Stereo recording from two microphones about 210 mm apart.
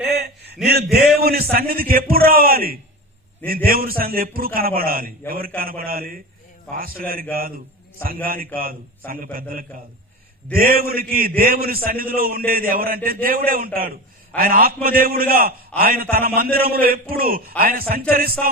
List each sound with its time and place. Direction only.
0.0 s a man's voice: 50° right (ahead or behind)